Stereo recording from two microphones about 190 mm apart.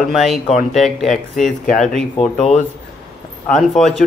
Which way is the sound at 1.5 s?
40° left (ahead or behind).